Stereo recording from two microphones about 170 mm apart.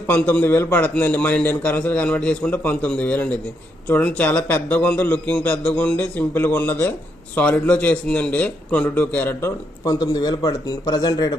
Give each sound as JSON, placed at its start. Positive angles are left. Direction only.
{"t": 0.1, "sound": "a man's voice", "side_deg": 10}
{"t": 9.8, "sound": "speech", "side_deg": 20}